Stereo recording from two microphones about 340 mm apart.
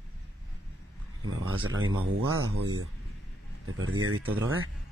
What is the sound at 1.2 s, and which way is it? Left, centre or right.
Speech, right.